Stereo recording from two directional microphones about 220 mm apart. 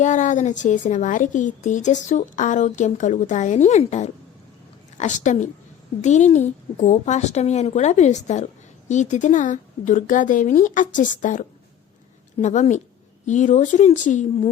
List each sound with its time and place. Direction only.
0.0 s a woman's voice: 35° left (ahead or behind)